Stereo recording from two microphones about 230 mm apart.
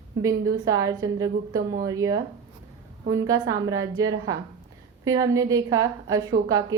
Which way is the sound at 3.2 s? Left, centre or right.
Centre.